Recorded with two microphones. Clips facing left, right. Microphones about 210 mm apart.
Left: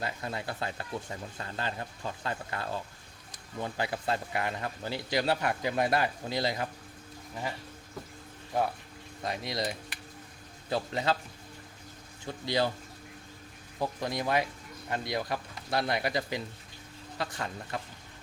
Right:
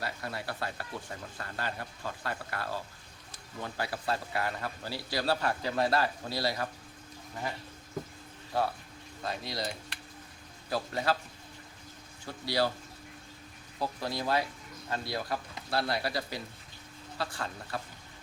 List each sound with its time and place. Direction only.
0.0 s a man's voice: 20° left (ahead or behind)
8.5 s a man's voice: 20° left (ahead or behind)
12.2 s a man's voice: 20° left (ahead or behind)
13.7 s a man's voice: 20° left (ahead or behind)